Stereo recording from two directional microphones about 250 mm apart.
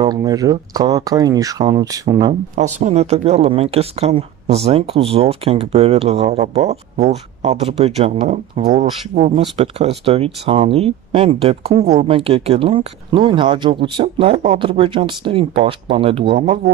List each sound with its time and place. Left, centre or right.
0.0 s speech: centre
2.5 s speech: right
16.3 s speech: right